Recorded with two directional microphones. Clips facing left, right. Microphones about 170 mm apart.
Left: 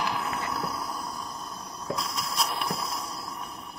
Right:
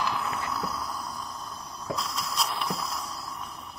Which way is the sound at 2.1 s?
15° left (ahead or behind).